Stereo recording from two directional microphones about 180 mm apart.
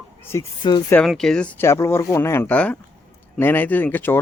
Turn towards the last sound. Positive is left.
turn(degrees=10)  # may be behind; listen again after turning